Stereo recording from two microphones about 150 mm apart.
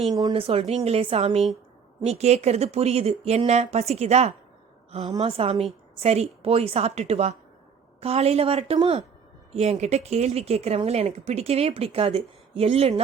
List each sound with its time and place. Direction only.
0.1 s speech: 25° right (ahead or behind)
0.4 s a woman's voice: 40° right (ahead or behind)